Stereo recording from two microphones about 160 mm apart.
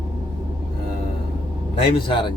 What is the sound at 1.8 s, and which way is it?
Speech, 30° left (ahead or behind).